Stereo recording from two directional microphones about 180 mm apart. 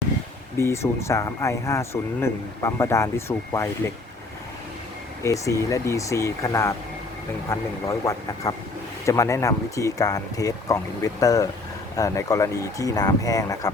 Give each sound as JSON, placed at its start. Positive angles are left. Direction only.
{"t": 0.5, "sound": "speech", "side_deg": 15}
{"t": 5.2, "sound": "speech", "side_deg": 15}